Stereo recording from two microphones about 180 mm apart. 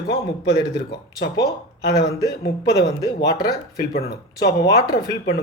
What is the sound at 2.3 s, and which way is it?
Speech, 65° left (ahead or behind).